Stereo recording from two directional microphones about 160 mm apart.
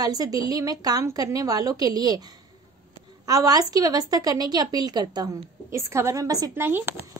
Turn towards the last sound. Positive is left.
turn(degrees=-15)  # may be behind; listen again after turning